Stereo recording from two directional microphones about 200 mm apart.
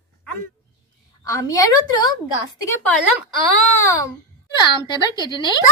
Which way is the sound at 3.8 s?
15° left (ahead or behind).